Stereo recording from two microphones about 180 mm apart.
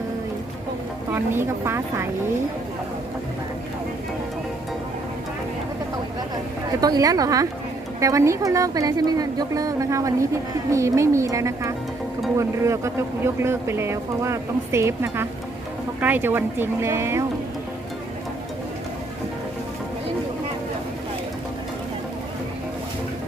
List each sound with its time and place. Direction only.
1.1 s speech: 15° right (ahead or behind)
6.8 s speech: 20° right (ahead or behind)